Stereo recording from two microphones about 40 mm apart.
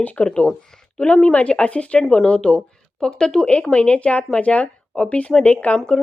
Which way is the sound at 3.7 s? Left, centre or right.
Left.